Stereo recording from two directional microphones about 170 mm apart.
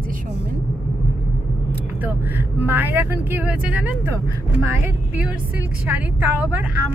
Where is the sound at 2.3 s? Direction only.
10° right (ahead or behind).